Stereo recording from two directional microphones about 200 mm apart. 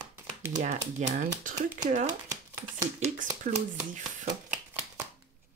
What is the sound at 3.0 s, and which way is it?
Speech, 40° right (ahead or behind).